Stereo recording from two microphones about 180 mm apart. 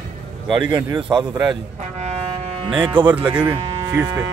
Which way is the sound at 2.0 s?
35° right (ahead or behind).